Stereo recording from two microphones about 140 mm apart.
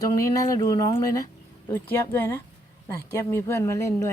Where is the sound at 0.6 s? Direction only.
35° left (ahead or behind).